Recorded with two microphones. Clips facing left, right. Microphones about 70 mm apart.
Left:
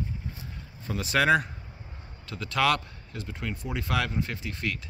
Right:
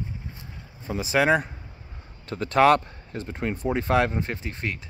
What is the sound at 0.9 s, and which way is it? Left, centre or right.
Speech, centre.